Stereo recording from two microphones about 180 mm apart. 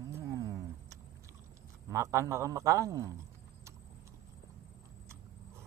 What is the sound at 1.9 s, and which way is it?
A man's voice, 15° right (ahead or behind).